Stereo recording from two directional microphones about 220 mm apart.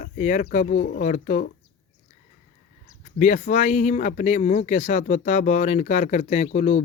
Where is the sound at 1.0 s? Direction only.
35° left (ahead or behind).